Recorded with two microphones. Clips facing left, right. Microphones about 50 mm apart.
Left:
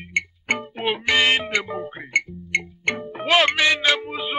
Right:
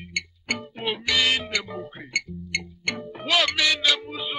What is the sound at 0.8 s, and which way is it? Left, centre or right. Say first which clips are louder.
Music: left 4 dB; left.